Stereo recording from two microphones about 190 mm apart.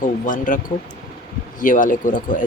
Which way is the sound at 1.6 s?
45° left (ahead or behind).